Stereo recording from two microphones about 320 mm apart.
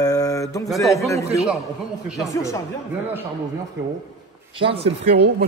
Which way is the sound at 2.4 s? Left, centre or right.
Centre.